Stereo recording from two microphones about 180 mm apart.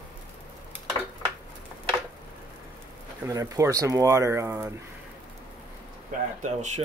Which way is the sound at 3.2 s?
20° right (ahead or behind).